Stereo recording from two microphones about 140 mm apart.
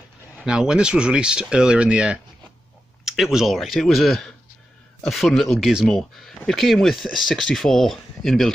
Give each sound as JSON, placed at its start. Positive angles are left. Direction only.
{"t": 0.4, "sound": "speech", "side_deg": -5}